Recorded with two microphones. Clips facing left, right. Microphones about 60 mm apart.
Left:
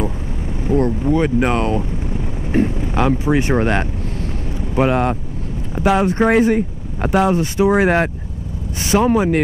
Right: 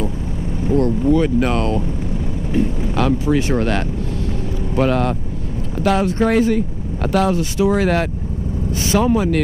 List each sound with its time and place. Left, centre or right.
0.7 s speech: left
2.5 s speech: left
2.9 s speech: left